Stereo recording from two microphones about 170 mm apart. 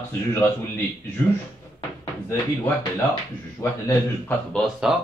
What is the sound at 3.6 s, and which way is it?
Speech, 15° left (ahead or behind).